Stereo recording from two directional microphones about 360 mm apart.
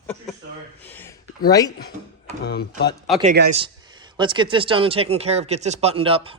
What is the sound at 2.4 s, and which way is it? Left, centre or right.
Speech, left.